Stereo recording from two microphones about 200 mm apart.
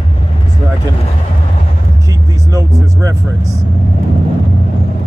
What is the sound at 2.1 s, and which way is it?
Speech, 15° right (ahead or behind).